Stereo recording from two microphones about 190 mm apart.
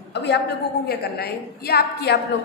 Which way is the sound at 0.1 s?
65° left (ahead or behind).